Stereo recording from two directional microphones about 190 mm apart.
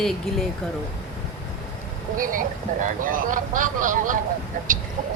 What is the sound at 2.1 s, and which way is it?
Speech, 45° right (ahead or behind).